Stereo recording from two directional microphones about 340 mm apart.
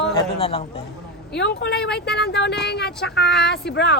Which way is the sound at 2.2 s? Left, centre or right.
Left.